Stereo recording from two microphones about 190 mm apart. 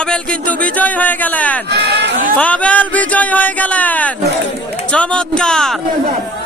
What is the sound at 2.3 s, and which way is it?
Speech, 5° left (ahead or behind).